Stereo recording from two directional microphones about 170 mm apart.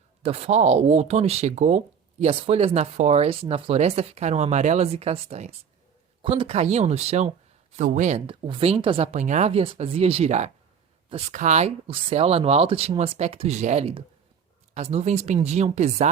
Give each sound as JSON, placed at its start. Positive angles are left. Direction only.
{"t": 0.2, "sound": "speech", "side_deg": -35}
{"t": 8.3, "sound": "speech", "side_deg": -30}
{"t": 9.1, "sound": "speech", "side_deg": -45}